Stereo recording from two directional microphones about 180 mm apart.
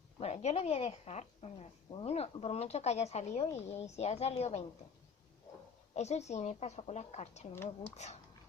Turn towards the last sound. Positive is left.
turn(degrees=15)  # may be behind; listen again after turning